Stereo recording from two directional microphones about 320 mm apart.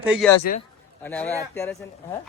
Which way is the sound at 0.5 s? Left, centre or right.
Left.